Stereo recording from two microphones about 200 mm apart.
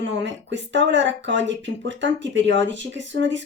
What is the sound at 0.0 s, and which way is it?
Speech, 65° right (ahead or behind).